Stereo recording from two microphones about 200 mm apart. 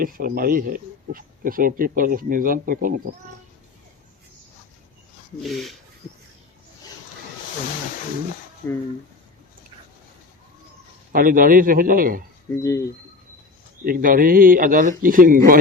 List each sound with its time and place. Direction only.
0.0 s speech: 45° right (ahead or behind)
5.4 s speech: centre (ahead or behind)
8.6 s speech: 10° left (ahead or behind)
11.1 s speech: 45° right (ahead or behind)
12.6 s speech: 15° left (ahead or behind)
13.8 s speech: 45° right (ahead or behind)